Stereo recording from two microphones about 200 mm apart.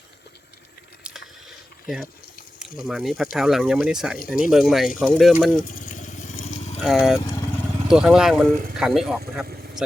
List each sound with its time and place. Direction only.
2.6 s speech: centre (ahead or behind)
5.6 s vehicle: 45° left (ahead or behind)
6.7 s speech: centre (ahead or behind)